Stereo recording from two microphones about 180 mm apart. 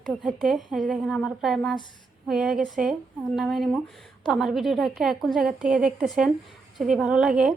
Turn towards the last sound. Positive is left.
turn(degrees=-5)  # may be behind; listen again after turning